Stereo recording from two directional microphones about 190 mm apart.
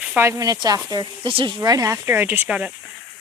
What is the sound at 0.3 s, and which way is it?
Speech, 20° right (ahead or behind).